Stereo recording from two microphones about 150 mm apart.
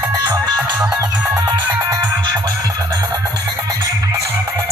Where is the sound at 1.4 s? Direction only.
25° right (ahead or behind).